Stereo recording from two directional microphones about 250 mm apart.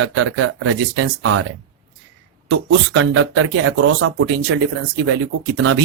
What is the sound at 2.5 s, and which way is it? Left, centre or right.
Speech, right.